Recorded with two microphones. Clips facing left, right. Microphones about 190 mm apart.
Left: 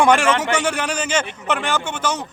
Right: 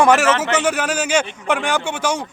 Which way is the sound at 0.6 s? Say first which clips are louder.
Right 3 dB; 5° right (ahead or behind).